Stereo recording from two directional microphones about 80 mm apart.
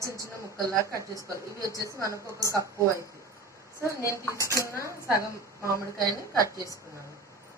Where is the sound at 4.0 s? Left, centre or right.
Left.